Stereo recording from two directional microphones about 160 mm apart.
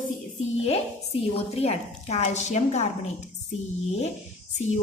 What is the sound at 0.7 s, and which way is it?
A woman's voice, 40° left (ahead or behind).